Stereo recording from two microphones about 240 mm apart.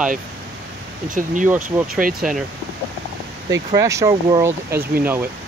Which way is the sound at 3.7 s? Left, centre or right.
Centre.